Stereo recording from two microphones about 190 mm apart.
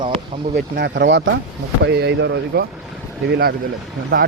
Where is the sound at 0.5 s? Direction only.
60° right (ahead or behind).